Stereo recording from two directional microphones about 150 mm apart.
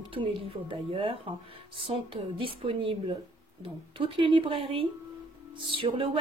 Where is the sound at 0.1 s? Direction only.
35° right (ahead or behind).